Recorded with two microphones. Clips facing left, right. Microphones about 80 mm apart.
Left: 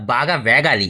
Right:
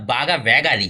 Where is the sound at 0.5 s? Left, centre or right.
Left.